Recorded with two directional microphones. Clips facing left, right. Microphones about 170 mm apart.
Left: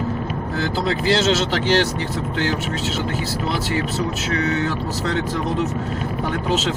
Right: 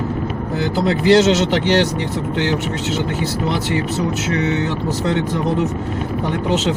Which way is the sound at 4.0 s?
20° right (ahead or behind).